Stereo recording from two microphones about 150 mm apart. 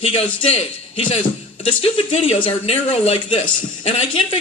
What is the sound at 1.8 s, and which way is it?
Speech, 40° left (ahead or behind).